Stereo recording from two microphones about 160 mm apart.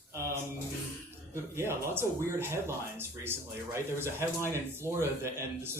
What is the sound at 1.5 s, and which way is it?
Speech, 15° right (ahead or behind).